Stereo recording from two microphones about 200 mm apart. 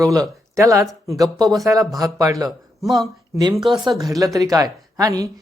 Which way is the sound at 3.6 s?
25° right (ahead or behind).